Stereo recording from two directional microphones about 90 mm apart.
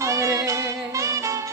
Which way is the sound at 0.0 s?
35° right (ahead or behind).